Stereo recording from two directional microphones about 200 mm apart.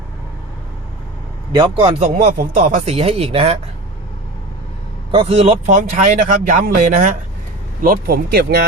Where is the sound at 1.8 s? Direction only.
35° right (ahead or behind).